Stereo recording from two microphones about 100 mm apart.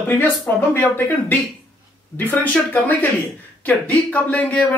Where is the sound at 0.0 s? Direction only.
20° left (ahead or behind).